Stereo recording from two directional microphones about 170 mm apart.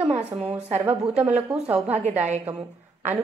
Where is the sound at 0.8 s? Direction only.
10° right (ahead or behind).